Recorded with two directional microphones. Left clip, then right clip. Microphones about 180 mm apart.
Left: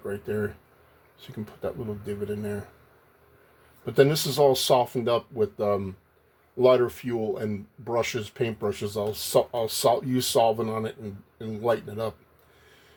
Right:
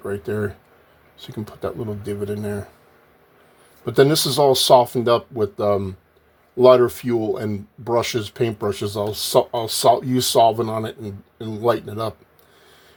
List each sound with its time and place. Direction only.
0.0 s speech: 45° right (ahead or behind)
3.8 s speech: 45° right (ahead or behind)